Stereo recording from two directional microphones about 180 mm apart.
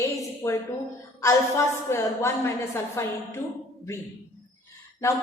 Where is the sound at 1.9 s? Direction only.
15° left (ahead or behind).